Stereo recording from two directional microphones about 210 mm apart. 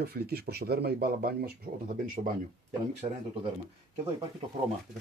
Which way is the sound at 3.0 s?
30° right (ahead or behind).